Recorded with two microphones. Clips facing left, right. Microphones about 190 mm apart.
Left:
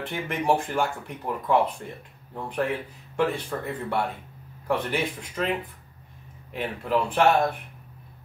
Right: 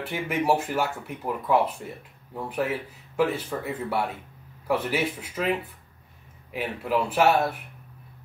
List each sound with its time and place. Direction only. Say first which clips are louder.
0.0 s speech: right 2 dB; 5° right (ahead or behind)
6.5 s speech: even; 5° right (ahead or behind)